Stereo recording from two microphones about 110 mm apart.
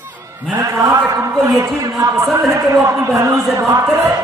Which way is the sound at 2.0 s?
30° right (ahead or behind).